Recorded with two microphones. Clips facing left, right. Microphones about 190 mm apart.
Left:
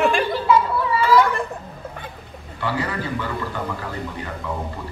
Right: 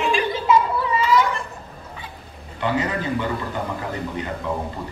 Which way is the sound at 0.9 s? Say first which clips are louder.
Left 3 dB; 55° left (ahead or behind).